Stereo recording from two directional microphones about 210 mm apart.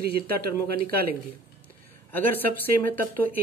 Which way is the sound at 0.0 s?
50° right (ahead or behind).